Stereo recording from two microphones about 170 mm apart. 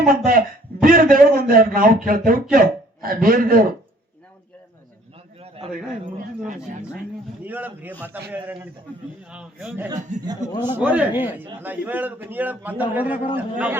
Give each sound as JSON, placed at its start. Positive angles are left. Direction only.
{"t": 0.0, "sound": "a man's voice", "side_deg": -55}
{"t": 6.1, "sound": "speech", "side_deg": -45}
{"t": 7.4, "sound": "a man's voice", "side_deg": -10}
{"t": 9.3, "sound": "a man's voice", "side_deg": -5}
{"t": 10.4, "sound": "a man's voice", "side_deg": 25}
{"t": 10.8, "sound": "a man's voice", "side_deg": -10}